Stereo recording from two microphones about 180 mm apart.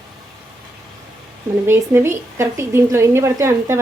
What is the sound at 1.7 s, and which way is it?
A woman's voice, 15° right (ahead or behind).